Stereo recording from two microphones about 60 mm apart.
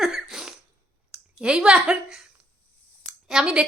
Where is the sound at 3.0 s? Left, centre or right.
Centre.